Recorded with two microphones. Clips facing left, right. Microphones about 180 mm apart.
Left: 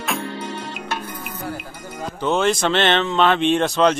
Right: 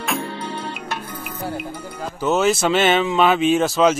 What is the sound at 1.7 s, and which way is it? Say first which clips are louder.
Speech: right 1 dB; 5° right (ahead or behind).